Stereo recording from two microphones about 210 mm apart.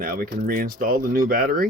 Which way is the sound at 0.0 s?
45° right (ahead or behind).